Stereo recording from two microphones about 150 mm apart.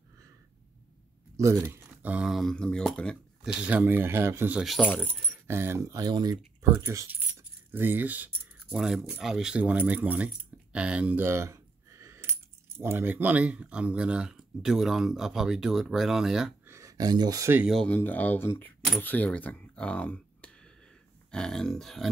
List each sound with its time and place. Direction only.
1.3 s speech: 20° right (ahead or behind); by 3.2 s 5° left (ahead or behind)
3.5 s speech: 10° right (ahead or behind)
4.6 s speech: 5° left (ahead or behind)
5.3 s speech: 15° right (ahead or behind)
16.6 s speech: 20° right (ahead or behind)
17.6 s speech: centre (ahead or behind)
17.9 s speech: 10° left (ahead or behind)